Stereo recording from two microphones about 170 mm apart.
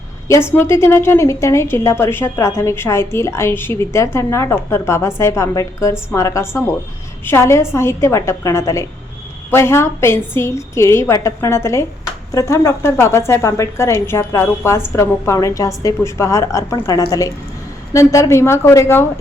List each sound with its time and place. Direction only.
0.5 s a woman's voice: 15° left (ahead or behind)